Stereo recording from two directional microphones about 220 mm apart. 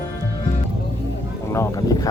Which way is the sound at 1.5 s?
10° left (ahead or behind).